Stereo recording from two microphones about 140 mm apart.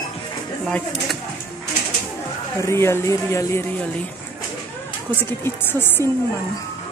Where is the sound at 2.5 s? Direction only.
20° left (ahead or behind).